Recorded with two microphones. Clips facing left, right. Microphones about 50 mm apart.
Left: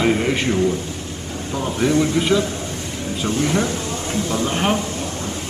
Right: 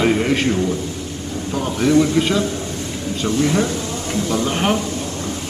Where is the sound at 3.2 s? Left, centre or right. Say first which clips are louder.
Right 2 dB; left.